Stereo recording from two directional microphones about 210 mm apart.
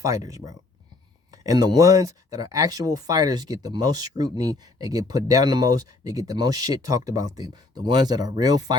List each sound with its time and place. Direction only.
0.0 s speech: 15° right (ahead or behind)